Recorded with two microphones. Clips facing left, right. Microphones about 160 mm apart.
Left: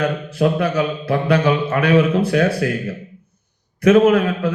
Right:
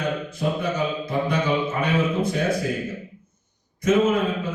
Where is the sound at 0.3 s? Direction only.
75° left (ahead or behind).